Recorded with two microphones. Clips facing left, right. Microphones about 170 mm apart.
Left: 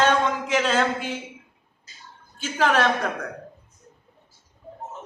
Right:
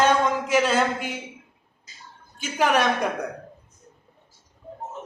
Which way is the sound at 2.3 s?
15° right (ahead or behind).